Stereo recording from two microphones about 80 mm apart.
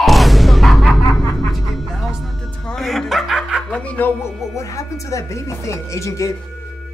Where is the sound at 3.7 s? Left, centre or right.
Centre.